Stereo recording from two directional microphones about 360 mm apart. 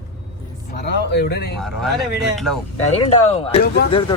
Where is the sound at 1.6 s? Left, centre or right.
Centre.